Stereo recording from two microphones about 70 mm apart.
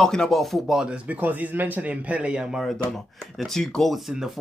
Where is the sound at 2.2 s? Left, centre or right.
Centre.